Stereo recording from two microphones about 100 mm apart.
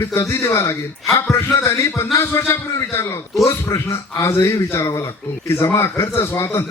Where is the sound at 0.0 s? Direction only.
30° left (ahead or behind).